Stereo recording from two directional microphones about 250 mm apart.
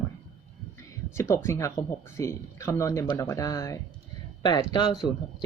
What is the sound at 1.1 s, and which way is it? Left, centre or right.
Speech, centre.